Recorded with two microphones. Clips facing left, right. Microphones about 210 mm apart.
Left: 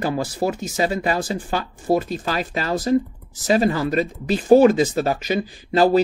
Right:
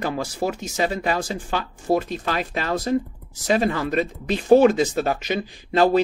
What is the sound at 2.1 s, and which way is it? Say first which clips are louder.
Speech: left 1 dB; 35° left (ahead or behind).